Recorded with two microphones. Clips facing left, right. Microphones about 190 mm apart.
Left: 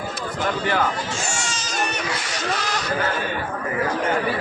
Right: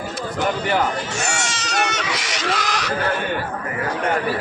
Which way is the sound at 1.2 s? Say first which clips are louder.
Right 3 dB; 70° right (ahead or behind).